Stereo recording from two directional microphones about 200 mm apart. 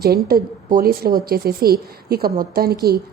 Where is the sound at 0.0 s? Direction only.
50° right (ahead or behind).